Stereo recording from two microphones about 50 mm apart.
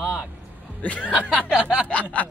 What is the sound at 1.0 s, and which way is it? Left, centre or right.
Speech, right.